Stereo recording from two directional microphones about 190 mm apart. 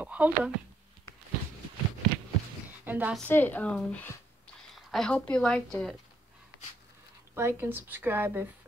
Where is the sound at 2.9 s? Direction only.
10° right (ahead or behind).